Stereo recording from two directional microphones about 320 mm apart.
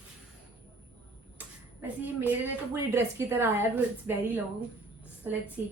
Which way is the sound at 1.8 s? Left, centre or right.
Centre.